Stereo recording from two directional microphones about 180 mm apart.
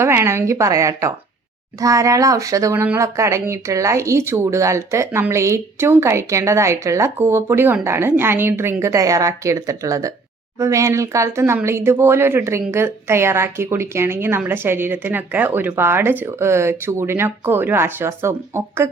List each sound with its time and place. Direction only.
0.0 s speech: 15° right (ahead or behind)